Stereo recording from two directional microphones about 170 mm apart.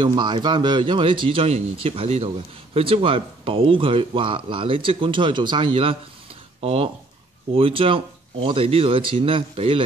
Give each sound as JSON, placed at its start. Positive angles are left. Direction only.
{"t": 0.0, "sound": "speech", "side_deg": -25}